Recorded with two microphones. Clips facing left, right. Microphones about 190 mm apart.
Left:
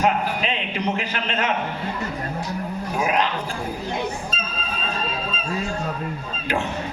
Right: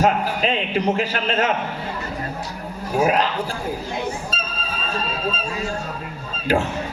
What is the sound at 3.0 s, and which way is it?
Speech, 40° right (ahead or behind).